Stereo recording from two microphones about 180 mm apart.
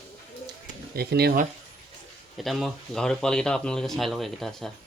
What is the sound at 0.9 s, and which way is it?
Speech, 60° right (ahead or behind).